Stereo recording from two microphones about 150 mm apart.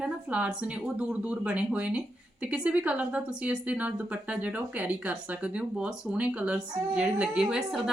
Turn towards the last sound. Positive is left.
turn(degrees=-5)  # may be behind; listen again after turning